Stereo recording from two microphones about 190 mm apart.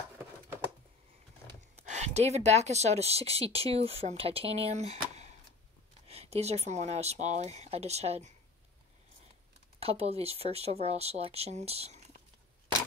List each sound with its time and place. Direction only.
1.8 s speech: 35° right (ahead or behind)
9.8 s speech: 30° right (ahead or behind)